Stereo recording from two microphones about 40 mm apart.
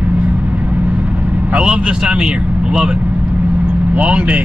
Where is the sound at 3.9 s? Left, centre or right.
Right.